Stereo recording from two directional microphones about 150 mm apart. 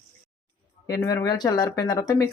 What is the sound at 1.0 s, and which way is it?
Speech, 20° left (ahead or behind).